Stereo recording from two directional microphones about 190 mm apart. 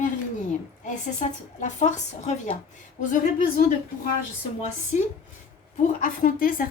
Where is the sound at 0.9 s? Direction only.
40° left (ahead or behind).